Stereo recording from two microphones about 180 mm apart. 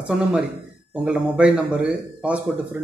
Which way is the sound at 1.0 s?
5° right (ahead or behind).